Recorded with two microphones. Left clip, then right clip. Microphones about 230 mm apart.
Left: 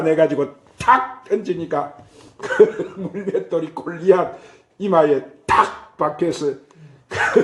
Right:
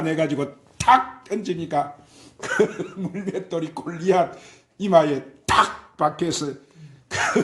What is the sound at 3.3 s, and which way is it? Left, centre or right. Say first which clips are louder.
A man's voice: left 7 dB; right.